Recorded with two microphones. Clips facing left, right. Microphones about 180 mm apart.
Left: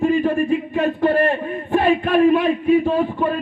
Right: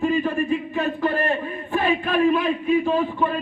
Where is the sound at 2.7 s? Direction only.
50° left (ahead or behind).